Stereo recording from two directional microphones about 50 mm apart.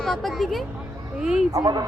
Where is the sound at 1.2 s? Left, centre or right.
Centre.